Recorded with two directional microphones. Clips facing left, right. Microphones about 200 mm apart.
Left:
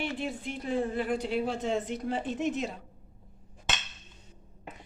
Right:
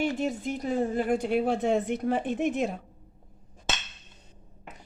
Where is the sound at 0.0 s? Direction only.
45° right (ahead or behind).